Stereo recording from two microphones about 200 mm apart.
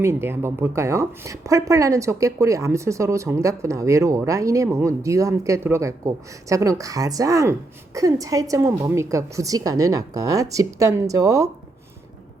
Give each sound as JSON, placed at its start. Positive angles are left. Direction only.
{"t": 0.0, "sound": "speech", "side_deg": -15}